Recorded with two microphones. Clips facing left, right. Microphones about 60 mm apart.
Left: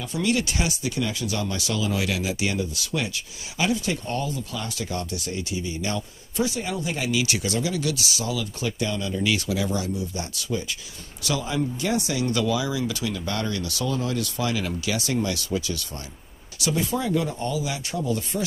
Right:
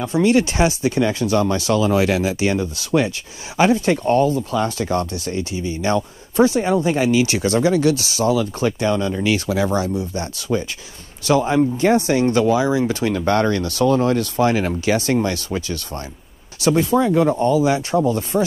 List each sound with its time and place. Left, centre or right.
0.0 s speech: right